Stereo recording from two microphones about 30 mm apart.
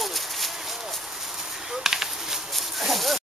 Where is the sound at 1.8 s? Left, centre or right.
Centre.